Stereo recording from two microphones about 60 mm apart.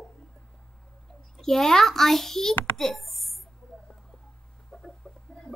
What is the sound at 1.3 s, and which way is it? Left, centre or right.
A child's voice, centre.